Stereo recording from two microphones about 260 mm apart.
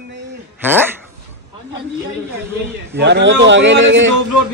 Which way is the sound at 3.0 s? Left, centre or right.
Right.